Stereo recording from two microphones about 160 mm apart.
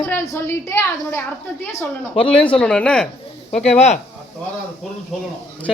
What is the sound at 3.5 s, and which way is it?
Speech, 45° left (ahead or behind).